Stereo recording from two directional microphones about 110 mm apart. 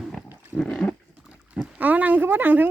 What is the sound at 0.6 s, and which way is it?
Wild animals, 10° left (ahead or behind).